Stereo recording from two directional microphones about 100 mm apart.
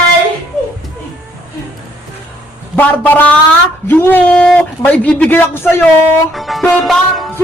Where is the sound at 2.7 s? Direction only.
15° left (ahead or behind).